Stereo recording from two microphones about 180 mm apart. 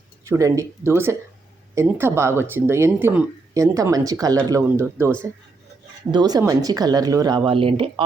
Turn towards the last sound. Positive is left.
turn(degrees=-30)  # may be behind; listen again after turning